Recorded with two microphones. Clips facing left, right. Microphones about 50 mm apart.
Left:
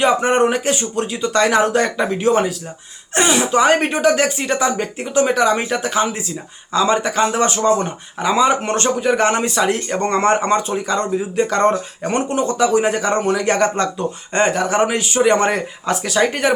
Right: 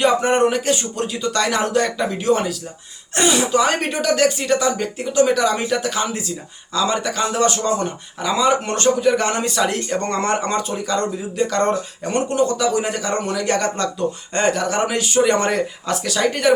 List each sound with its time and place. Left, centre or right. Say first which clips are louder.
0.0 s a man's voice: left 1 dB; centre